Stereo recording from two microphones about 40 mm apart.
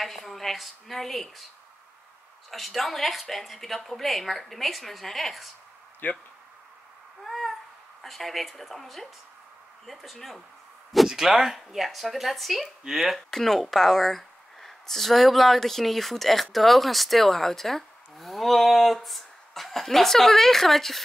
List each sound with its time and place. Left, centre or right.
0.0 s a woman's voice: centre
2.5 s a woman's voice: centre
6.0 s speech: left
7.2 s a sound: centre
8.0 s a woman's voice: centre
11.1 s a woman's voice: centre
13.3 s a woman's voice: centre